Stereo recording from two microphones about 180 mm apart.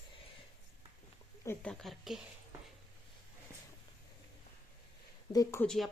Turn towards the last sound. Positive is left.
turn(degrees=0)  # may be behind; listen again after turning